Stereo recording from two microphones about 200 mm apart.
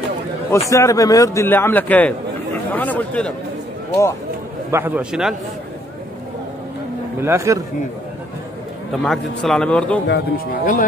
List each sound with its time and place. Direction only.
0.5 s a man's voice: 15° left (ahead or behind)
4.6 s a man's voice: 10° right (ahead or behind)
7.2 s a man's voice: 15° right (ahead or behind)
8.9 s a man's voice: centre (ahead or behind)
10.0 s speech: 55° left (ahead or behind)
10.6 s speech: 40° left (ahead or behind)